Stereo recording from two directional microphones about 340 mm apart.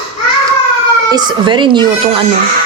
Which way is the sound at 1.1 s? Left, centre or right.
Centre.